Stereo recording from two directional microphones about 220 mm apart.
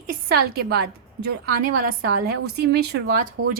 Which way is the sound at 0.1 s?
45° right (ahead or behind).